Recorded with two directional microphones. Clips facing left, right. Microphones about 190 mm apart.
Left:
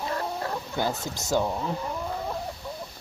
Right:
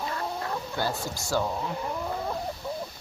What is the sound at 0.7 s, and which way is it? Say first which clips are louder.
Speech: left 2 dB; 20° left (ahead or behind).